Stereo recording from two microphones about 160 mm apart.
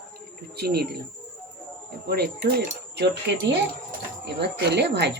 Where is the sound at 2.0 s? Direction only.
75° right (ahead or behind).